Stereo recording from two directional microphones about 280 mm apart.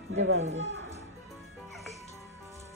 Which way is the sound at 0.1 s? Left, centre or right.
Right.